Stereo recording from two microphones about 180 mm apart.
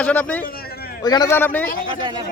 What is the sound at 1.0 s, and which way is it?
Speech, 20° left (ahead or behind).